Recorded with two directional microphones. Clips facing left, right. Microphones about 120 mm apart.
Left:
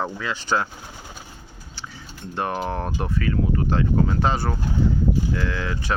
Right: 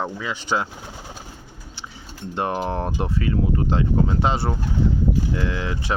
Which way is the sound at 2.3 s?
20° right (ahead or behind).